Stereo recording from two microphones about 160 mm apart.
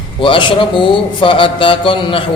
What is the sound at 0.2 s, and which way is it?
Speech, 30° left (ahead or behind).